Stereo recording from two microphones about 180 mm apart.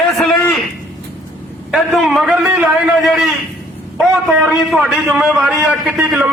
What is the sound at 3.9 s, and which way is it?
A man's voice, 10° right (ahead or behind).